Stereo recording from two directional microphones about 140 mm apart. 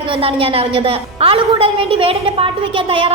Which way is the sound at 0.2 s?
40° right (ahead or behind).